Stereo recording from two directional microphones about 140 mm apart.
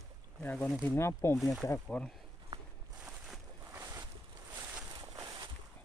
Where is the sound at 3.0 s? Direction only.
5° right (ahead or behind).